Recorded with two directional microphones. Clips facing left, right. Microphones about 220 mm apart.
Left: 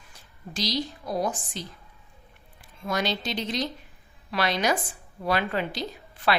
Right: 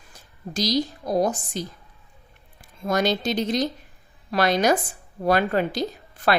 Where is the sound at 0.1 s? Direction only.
40° right (ahead or behind).